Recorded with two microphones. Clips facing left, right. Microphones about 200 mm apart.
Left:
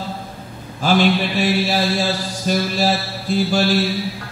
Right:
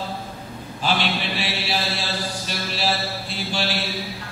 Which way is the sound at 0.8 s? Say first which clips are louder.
Left 8 dB; 45° left (ahead or behind).